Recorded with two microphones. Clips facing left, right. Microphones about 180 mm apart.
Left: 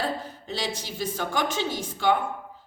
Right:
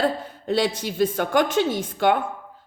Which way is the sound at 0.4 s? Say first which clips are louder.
Right 11 dB; 55° right (ahead or behind).